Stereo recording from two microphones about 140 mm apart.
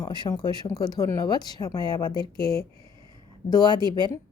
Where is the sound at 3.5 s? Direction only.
30° left (ahead or behind).